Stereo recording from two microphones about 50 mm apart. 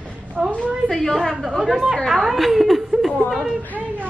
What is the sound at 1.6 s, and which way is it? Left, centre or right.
A woman's voice, centre.